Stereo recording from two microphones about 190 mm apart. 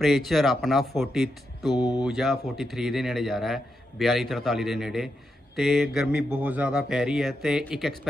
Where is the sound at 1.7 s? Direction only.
20° left (ahead or behind).